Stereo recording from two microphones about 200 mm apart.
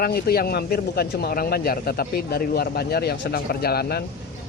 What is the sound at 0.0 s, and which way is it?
Speech, 50° left (ahead or behind).